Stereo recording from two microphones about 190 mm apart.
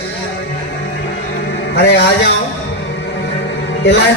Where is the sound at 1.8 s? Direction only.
65° left (ahead or behind).